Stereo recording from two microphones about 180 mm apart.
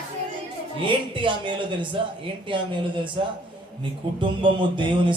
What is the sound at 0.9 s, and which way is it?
A man's voice, 25° right (ahead or behind).